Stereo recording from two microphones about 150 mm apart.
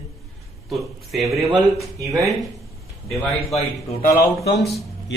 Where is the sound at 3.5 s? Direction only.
45° left (ahead or behind).